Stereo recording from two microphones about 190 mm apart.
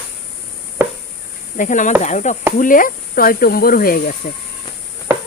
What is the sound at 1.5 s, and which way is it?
Chop, 40° left (ahead or behind).